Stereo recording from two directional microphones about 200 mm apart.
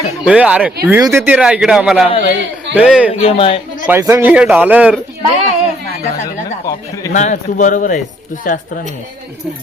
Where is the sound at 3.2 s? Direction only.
30° left (ahead or behind).